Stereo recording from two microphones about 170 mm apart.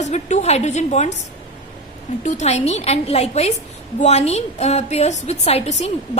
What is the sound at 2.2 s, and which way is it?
A woman's voice, 40° left (ahead or behind).